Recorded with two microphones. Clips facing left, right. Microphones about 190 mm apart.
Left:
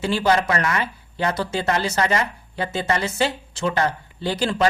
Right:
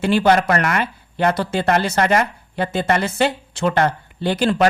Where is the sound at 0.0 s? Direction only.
60° right (ahead or behind).